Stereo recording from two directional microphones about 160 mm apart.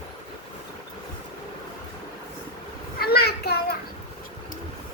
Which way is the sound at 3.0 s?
80° left.